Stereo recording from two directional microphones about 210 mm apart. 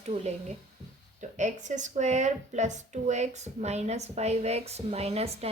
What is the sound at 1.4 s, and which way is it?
A woman's voice, 35° right (ahead or behind).